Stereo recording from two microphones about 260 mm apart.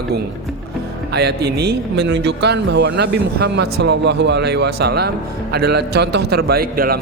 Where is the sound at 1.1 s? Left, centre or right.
Right.